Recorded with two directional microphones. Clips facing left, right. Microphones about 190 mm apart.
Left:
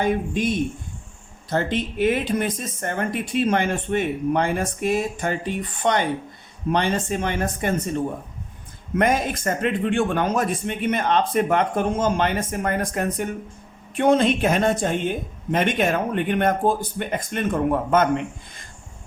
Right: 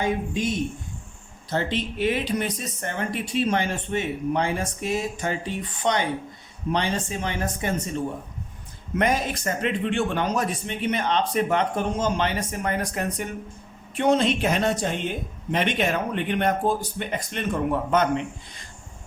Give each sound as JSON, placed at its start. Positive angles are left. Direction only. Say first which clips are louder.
{"t": 0.0, "sound": "speech", "louder": "left 3 dB", "side_deg": 55}
{"t": 9.0, "sound": "speech", "louder": "left 3 dB", "side_deg": 50}